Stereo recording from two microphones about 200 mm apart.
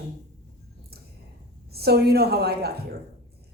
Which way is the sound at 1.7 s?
50° right (ahead or behind).